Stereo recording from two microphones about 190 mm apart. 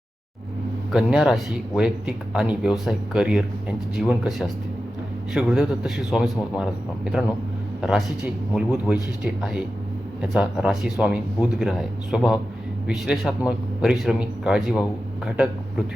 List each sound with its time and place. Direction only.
0.9 s speech: centre (ahead or behind)